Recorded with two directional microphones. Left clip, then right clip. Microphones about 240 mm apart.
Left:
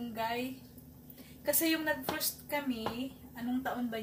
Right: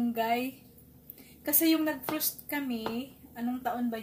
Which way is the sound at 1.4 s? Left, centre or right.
Right.